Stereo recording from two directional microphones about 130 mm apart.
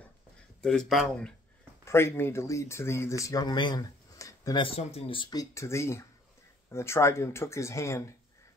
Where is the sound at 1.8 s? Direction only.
20° left (ahead or behind).